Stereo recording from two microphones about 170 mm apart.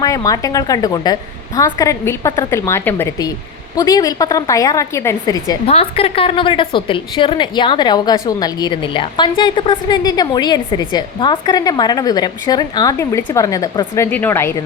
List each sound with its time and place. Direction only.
0.0 s a woman's voice: 20° left (ahead or behind)
5.6 s a woman's voice: 35° left (ahead or behind); by 14.6 s 15° left (ahead or behind)